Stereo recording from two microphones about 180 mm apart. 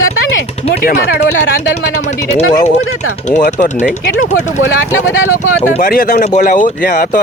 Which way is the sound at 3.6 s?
40° left (ahead or behind).